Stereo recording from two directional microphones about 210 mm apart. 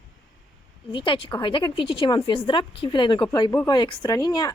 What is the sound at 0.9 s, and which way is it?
Speech, 25° left (ahead or behind).